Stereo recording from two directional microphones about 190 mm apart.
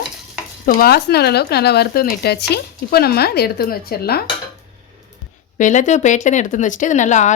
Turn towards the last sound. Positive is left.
turn(degrees=40)  # may be behind; listen again after turning